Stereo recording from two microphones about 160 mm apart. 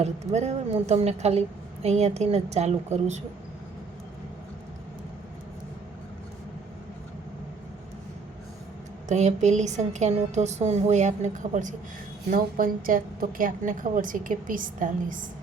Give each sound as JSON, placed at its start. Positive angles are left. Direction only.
{"t": 0.0, "sound": "a woman's voice", "side_deg": -45}
{"t": 9.0, "sound": "a woman's voice", "side_deg": -45}
{"t": 12.3, "sound": "a woman's voice", "side_deg": -65}